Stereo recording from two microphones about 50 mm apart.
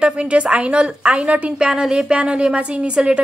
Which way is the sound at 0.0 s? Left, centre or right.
Right.